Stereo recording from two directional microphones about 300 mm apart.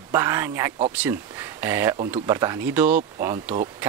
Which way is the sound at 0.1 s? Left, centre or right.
Centre.